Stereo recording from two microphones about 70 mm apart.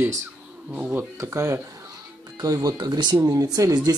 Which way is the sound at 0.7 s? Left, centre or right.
Centre.